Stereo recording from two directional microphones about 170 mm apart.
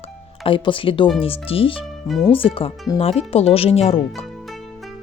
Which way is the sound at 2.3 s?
30° left (ahead or behind).